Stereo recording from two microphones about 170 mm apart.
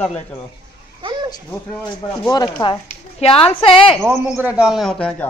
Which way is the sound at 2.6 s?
20° left (ahead or behind).